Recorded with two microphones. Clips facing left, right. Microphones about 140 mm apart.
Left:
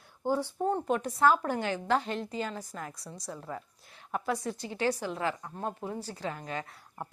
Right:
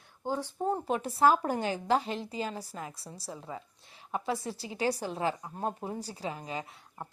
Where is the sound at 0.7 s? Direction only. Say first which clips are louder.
Even; 5° right (ahead or behind).